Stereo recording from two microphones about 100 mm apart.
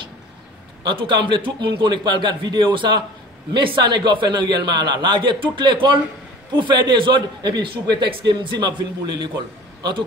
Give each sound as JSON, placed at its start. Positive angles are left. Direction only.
{"t": 0.8, "sound": "a man's voice", "side_deg": -50}